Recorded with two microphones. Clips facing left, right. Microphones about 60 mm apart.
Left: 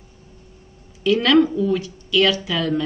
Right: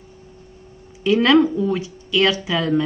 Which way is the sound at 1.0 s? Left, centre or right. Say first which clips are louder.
Right 1 dB; right.